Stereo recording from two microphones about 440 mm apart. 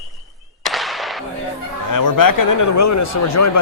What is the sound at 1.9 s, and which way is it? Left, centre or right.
Speech, left.